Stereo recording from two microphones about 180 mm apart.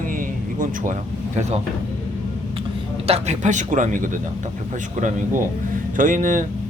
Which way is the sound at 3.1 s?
40° right (ahead or behind).